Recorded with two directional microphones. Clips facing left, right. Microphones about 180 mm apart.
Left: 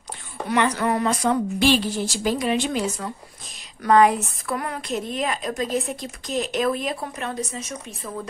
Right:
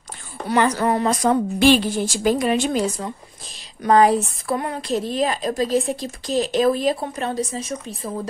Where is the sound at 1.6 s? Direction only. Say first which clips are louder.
Right 6 dB; 50° right (ahead or behind).